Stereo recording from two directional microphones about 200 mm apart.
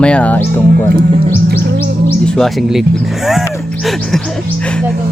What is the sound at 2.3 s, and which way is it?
Speech, centre (ahead or behind).